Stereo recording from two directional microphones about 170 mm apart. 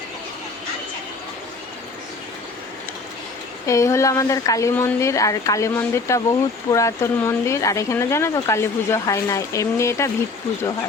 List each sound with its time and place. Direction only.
3.7 s speech: 15° left (ahead or behind)